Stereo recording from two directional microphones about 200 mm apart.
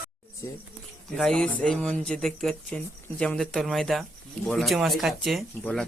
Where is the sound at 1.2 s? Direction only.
Centre (ahead or behind).